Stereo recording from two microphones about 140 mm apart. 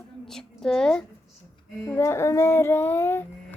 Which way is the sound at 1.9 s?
20° left (ahead or behind).